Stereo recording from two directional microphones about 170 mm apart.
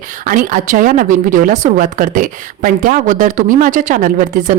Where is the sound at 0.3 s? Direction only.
50° right (ahead or behind).